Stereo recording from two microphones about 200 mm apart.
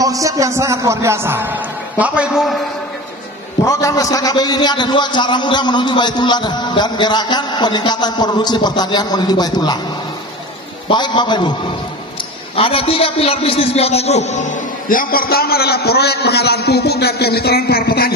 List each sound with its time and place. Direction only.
0.0 s speech: 15° right (ahead or behind); by 2.6 s centre (ahead or behind)
3.6 s a man's voice: 15° left (ahead or behind)
10.9 s a man's voice: 20° left (ahead or behind); by 18.1 s 50° left (ahead or behind)